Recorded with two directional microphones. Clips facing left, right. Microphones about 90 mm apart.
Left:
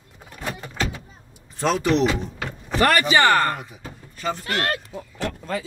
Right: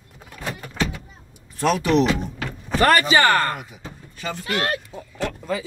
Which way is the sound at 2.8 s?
35° right (ahead or behind).